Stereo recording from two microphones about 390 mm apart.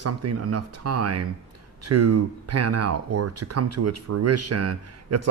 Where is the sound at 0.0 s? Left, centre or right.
Right.